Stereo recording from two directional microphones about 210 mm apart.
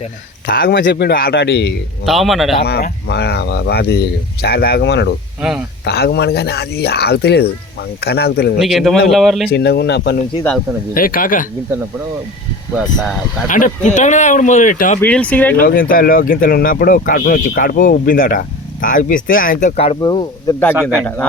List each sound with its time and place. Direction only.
0.4 s speech: 45° left (ahead or behind)
2.0 s speech: centre (ahead or behind)
2.6 s speech: 50° left (ahead or behind)
5.4 s speech: 5° right (ahead or behind)
5.8 s speech: 50° left (ahead or behind)
8.6 s speech: centre (ahead or behind)
9.5 s speech: 50° left (ahead or behind)
12.7 s speech: centre (ahead or behind)
13.5 s speech: 40° left (ahead or behind)
15.0 s speech: 5° left (ahead or behind)
15.5 s speech: 40° left (ahead or behind); by 20.6 s 20° left (ahead or behind)
20.8 s speech: 5° left (ahead or behind)